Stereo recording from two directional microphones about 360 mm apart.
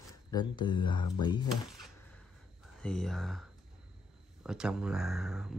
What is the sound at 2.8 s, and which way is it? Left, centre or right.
Speech, centre.